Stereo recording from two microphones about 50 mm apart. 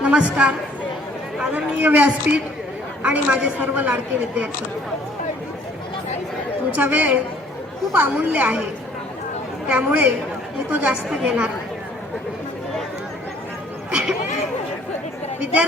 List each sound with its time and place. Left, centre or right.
0.0 s speech: right
1.4 s chatter: right
1.8 s a woman's voice: right
6.7 s a woman's voice: right
8.2 s a woman's voice: right
9.6 s a woman's voice: right
13.9 s a sound: right